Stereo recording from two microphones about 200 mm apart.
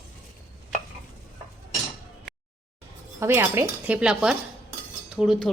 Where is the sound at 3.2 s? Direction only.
10° right (ahead or behind).